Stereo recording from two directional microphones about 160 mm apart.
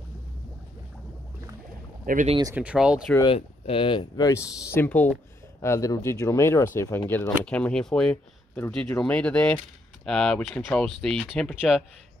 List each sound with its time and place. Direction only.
2.1 s speech: 60° right (ahead or behind)
2.5 s speech: 10° right (ahead or behind)
3.3 s speech: 35° left (ahead or behind)
4.3 s speech: 15° left (ahead or behind)